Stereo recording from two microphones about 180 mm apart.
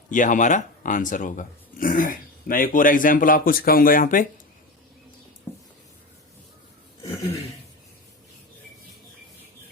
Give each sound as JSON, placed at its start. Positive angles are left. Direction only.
{"t": 0.1, "sound": "speech", "side_deg": 45}